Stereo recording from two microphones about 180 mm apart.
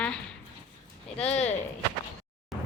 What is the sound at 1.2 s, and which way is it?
Speech, 40° left (ahead or behind).